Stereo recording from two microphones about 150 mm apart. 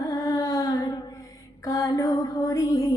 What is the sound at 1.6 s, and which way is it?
Female singing, 25° left (ahead or behind).